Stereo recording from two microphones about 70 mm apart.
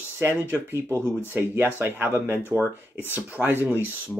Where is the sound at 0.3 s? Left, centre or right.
Right.